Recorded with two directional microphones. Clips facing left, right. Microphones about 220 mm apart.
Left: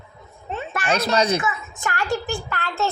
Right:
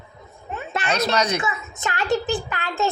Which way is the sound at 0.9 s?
30° left (ahead or behind).